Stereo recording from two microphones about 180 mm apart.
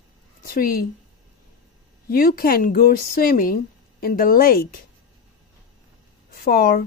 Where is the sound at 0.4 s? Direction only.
55° left (ahead or behind).